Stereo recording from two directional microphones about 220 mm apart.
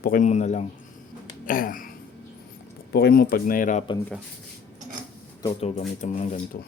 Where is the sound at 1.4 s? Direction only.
40° left (ahead or behind).